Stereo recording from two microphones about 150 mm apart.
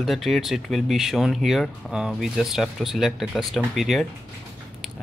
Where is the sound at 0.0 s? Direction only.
Centre (ahead or behind).